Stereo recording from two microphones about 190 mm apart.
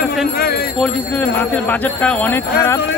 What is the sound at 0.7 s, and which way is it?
Speech, 5° left (ahead or behind).